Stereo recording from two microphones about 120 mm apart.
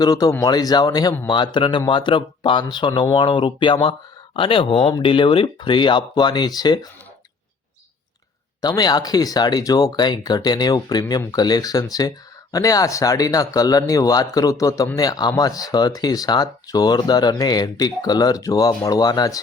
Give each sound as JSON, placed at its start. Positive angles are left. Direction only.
{"t": 0.0, "sound": "speech", "side_deg": 30}
{"t": 8.6, "sound": "speech", "side_deg": 35}